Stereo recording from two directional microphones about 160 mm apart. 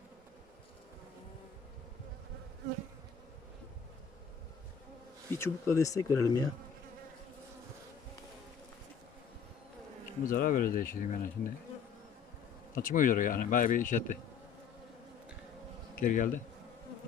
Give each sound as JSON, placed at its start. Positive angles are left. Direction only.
{"t": 5.4, "sound": "speech", "side_deg": 15}
{"t": 10.2, "sound": "speech", "side_deg": 60}
{"t": 12.7, "sound": "speech", "side_deg": 55}
{"t": 16.0, "sound": "speech", "side_deg": 55}